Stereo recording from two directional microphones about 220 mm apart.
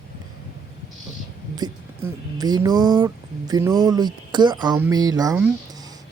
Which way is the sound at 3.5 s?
15° right (ahead or behind).